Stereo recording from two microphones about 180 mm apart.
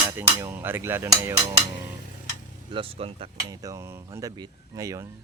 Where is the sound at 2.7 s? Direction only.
30° right (ahead or behind).